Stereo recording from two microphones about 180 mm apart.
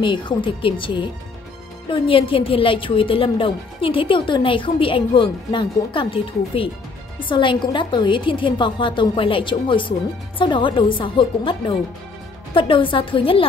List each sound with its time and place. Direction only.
0.0 s a woman's voice: 25° left (ahead or behind)